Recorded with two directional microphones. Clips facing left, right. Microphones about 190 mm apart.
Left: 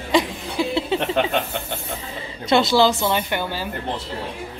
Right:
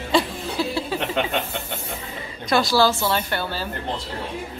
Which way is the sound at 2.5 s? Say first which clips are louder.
Left 2 dB; 20° left (ahead or behind).